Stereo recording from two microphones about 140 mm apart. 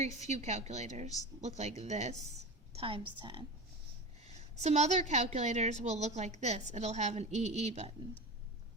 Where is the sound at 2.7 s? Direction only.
40° right (ahead or behind).